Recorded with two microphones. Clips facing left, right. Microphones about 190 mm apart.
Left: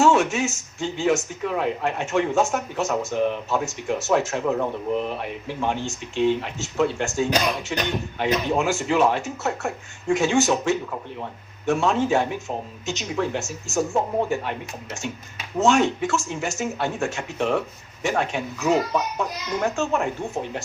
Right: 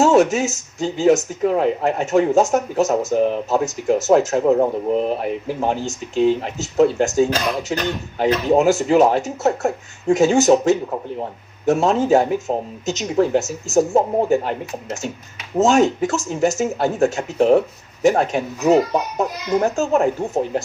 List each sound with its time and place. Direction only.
0.0 s speech: 40° right (ahead or behind)